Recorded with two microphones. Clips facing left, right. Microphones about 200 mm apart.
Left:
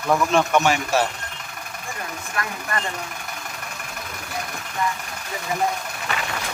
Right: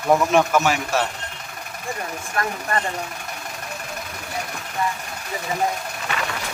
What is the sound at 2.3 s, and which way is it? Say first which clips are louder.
Speech: right 4 dB; 35° right (ahead or behind).